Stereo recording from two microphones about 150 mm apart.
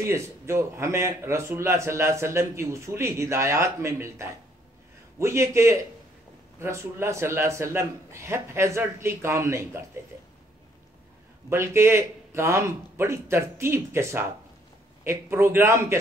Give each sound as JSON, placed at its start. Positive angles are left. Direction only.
{"t": 0.0, "sound": "a man's voice", "side_deg": -15}
{"t": 11.4, "sound": "a man's voice", "side_deg": -15}